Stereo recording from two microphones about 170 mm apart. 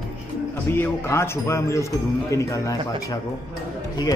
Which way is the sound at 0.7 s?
15° left (ahead or behind).